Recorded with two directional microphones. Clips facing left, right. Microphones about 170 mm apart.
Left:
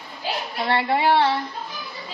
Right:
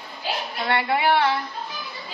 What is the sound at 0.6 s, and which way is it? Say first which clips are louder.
Speech: left 1 dB; 30° left (ahead or behind).